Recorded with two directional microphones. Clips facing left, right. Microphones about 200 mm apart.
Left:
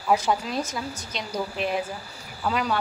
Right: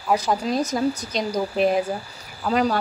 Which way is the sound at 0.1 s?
40° right (ahead or behind).